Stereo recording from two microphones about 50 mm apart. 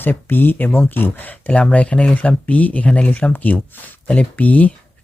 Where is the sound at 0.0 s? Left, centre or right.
Left.